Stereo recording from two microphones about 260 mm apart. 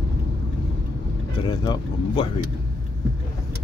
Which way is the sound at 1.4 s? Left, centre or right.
Centre.